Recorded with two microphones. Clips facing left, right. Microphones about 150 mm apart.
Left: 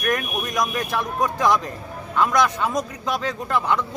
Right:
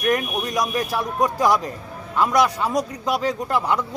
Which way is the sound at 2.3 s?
35° right (ahead or behind).